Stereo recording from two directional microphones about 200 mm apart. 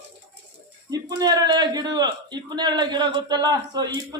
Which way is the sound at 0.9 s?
20° right (ahead or behind).